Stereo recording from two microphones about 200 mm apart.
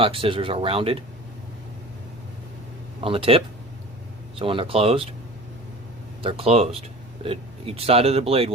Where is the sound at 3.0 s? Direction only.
25° right (ahead or behind).